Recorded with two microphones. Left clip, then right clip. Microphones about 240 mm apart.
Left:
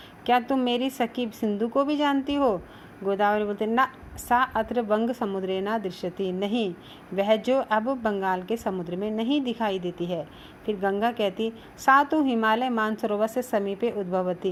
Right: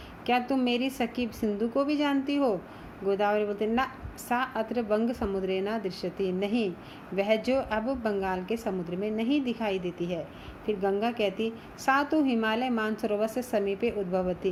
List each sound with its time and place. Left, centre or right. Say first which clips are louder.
0.3 s a woman's voice: left 4 dB; left